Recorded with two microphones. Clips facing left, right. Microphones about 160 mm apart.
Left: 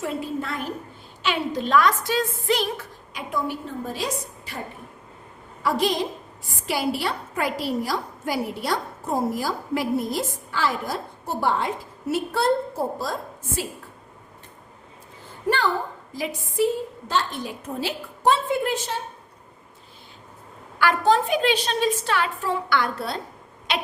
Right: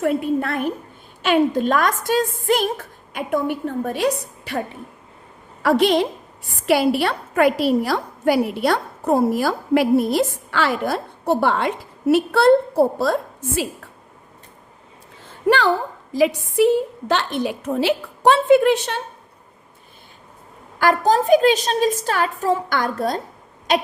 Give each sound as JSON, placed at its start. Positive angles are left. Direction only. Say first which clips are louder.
{"t": 0.0, "sound": "a woman's voice", "louder": "right 8 dB", "side_deg": -60}
{"t": 5.6, "sound": "a woman's voice", "louder": "right 7 dB", "side_deg": -70}
{"t": 15.4, "sound": "a woman's voice", "louder": "right 6 dB", "side_deg": -75}
{"t": 20.7, "sound": "a woman's voice", "louder": "right 3 dB", "side_deg": -40}